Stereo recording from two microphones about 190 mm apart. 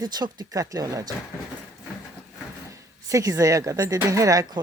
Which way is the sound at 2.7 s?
15° right (ahead or behind).